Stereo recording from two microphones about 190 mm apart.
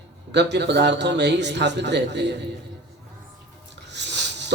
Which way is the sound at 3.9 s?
65° right (ahead or behind).